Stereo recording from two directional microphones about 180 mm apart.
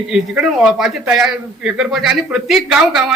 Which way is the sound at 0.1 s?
5° right (ahead or behind).